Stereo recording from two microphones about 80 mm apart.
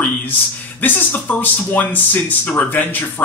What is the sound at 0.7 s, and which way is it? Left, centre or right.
Speech, left.